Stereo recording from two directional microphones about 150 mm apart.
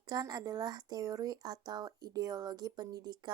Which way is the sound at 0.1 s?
25° right (ahead or behind).